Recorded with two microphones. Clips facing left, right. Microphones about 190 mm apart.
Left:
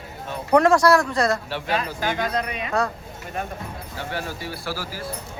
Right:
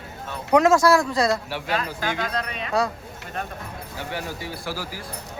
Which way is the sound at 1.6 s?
15° left (ahead or behind).